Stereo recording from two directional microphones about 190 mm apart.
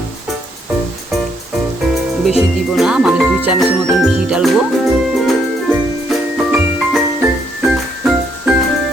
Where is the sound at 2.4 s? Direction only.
Centre (ahead or behind).